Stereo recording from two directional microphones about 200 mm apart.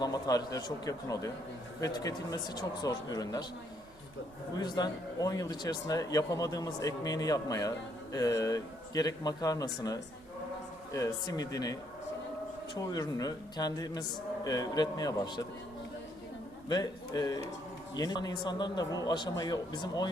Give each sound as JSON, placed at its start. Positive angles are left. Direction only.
{"t": 0.0, "sound": "a man's voice", "side_deg": 20}
{"t": 4.5, "sound": "a man's voice", "side_deg": 20}
{"t": 12.8, "sound": "speech", "side_deg": 20}
{"t": 16.6, "sound": "a man's voice", "side_deg": 20}